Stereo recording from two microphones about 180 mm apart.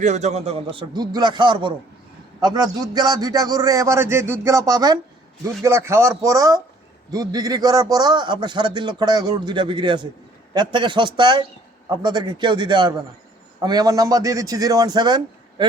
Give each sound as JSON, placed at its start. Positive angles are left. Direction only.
{"t": 0.0, "sound": "a man's voice", "side_deg": -40}